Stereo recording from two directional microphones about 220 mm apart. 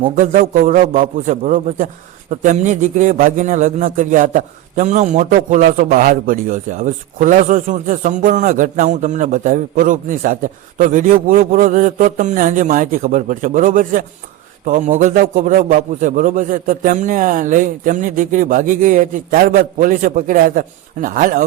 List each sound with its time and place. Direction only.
0.2 s a man's voice: 35° right (ahead or behind)